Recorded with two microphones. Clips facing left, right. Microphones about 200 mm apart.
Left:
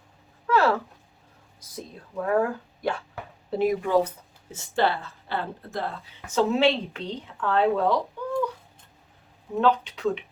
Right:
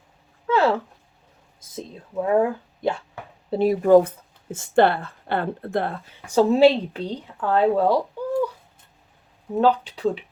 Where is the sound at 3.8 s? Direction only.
50° right (ahead or behind).